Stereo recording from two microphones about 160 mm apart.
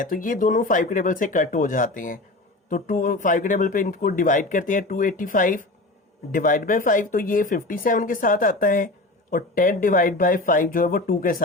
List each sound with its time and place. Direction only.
0.0 s speech: 55° left (ahead or behind)